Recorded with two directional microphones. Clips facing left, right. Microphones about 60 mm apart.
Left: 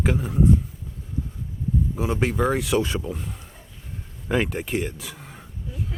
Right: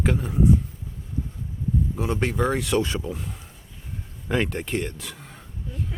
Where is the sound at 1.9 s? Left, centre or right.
Centre.